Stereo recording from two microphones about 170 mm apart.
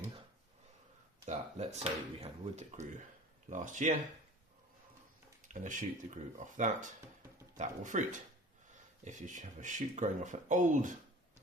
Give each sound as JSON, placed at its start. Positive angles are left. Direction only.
{"t": 1.2, "sound": "speech", "side_deg": -40}
{"t": 5.5, "sound": "speech", "side_deg": -50}